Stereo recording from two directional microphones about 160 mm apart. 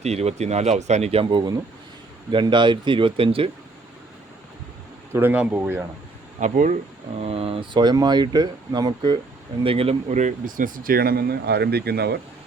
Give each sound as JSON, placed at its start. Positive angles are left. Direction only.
{"t": 0.0, "sound": "speech", "side_deg": -40}
{"t": 5.1, "sound": "speech", "side_deg": -10}
{"t": 6.4, "sound": "speech", "side_deg": -50}
{"t": 7.2, "sound": "speech", "side_deg": -40}
{"t": 9.6, "sound": "speech", "side_deg": -35}